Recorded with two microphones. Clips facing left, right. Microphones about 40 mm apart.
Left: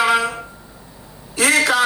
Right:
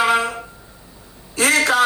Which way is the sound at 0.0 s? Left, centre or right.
Left.